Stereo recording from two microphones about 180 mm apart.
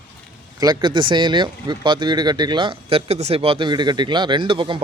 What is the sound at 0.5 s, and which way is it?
Speech, 20° right (ahead or behind).